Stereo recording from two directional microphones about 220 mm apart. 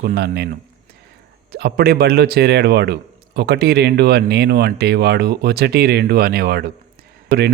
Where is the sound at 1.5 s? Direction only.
45° right (ahead or behind).